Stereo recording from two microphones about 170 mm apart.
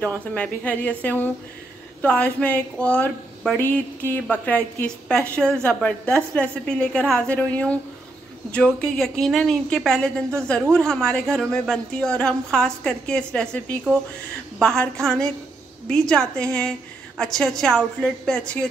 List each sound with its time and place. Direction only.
0.0 s a woman's voice: 5° left (ahead or behind)